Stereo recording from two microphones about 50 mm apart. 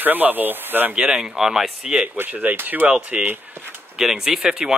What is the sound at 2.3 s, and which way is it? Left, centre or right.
Speech, right.